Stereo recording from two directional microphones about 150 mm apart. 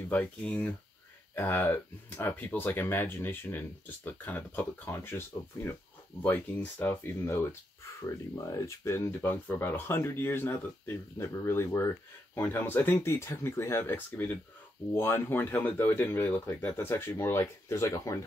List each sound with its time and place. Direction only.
0.1 s speech: 10° left (ahead or behind)